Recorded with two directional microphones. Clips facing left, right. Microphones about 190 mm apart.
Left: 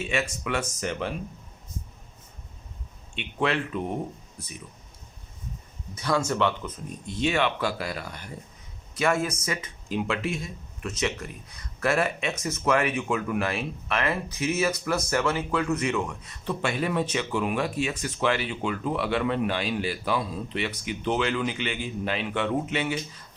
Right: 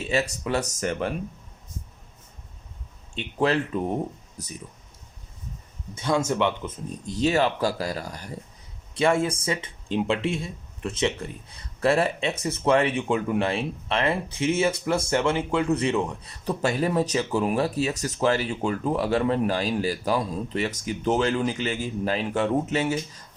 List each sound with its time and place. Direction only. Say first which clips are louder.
0.0 s speech: right 3 dB; 35° right (ahead or behind)
3.2 s speech: right 3 dB; 35° right (ahead or behind)
5.9 s speech: right 2 dB; 25° right (ahead or behind)
7.0 s speech: right 3 dB; 40° right (ahead or behind)
9.0 s speech: right 3 dB; 30° right (ahead or behind)